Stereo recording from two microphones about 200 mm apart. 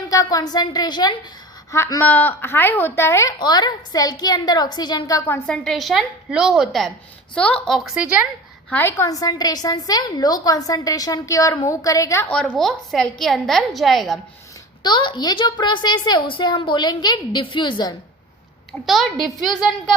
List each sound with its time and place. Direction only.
0.1 s a woman's voice: 20° left (ahead or behind); by 8.3 s 5° right (ahead or behind)
8.7 s a woman's voice: 10° left (ahead or behind)
14.8 s speech: 25° left (ahead or behind)
18.9 s a woman's voice: centre (ahead or behind)